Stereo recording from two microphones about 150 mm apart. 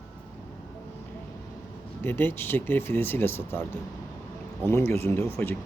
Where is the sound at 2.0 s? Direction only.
15° left (ahead or behind).